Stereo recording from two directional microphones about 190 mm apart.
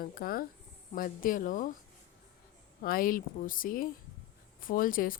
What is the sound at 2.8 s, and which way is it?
A woman's voice, 50° left (ahead or behind).